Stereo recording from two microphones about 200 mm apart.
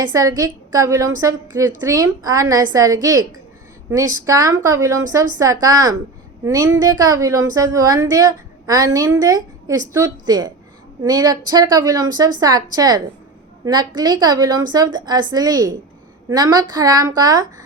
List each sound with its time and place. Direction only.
0.1 s a woman's voice: 15° right (ahead or behind)